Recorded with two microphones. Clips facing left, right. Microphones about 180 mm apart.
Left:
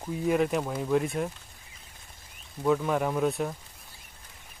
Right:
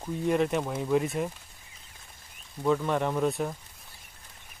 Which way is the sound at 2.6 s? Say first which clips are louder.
Left 1 dB; 5° left (ahead or behind).